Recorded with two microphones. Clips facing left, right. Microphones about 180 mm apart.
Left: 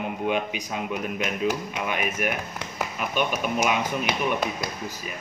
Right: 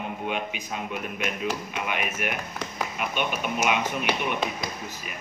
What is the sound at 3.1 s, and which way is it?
Speech, 40° left (ahead or behind).